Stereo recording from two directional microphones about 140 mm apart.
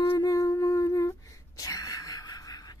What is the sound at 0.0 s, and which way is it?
Humming, 40° left (ahead or behind).